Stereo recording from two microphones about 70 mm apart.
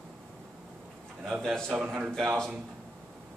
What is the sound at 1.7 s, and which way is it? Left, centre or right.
Speech, centre.